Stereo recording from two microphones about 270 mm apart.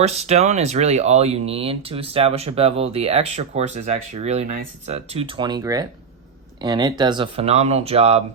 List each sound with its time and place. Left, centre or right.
0.0 s speech: right